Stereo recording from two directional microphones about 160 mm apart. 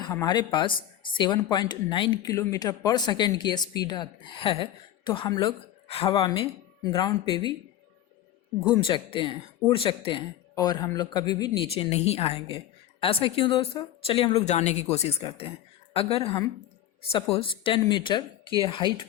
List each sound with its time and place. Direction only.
0.0 s speech: 25° left (ahead or behind)
8.9 s speech: 35° left (ahead or behind)